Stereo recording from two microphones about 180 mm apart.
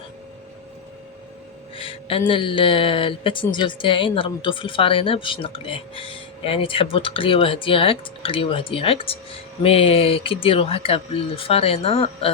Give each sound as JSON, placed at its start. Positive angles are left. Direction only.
{"t": 1.7, "sound": "speech", "side_deg": 30}